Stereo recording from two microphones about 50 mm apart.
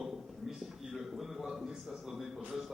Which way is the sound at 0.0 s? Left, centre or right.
Centre.